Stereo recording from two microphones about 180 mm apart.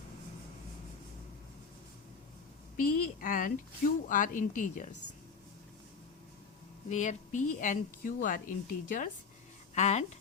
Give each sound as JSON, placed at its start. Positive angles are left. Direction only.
{"t": 2.7, "sound": "speech", "side_deg": 50}
{"t": 6.8, "sound": "speech", "side_deg": 40}
{"t": 9.7, "sound": "speech", "side_deg": 40}